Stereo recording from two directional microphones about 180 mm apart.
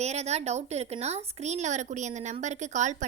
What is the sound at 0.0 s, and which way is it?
A woman's voice, 35° right (ahead or behind).